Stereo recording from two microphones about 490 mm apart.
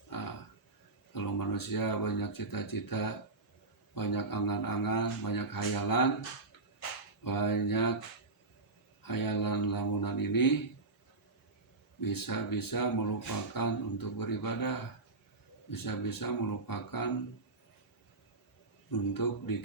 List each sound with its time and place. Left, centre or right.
0.1 s a sound: left
1.1 s speech: left
7.3 s speech: left
9.0 s speech: left
11.9 s speech: left
18.9 s speech: left